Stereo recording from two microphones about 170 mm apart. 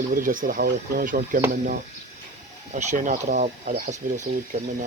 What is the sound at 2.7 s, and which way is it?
Speech, 45° right (ahead or behind).